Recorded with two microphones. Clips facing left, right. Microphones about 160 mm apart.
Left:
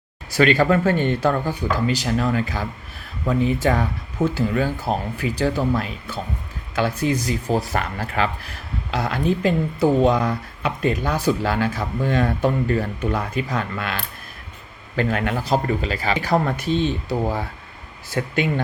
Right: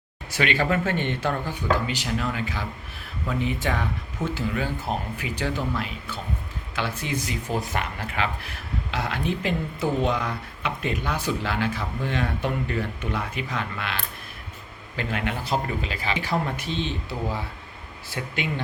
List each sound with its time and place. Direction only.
0.3 s speech: 40° left (ahead or behind)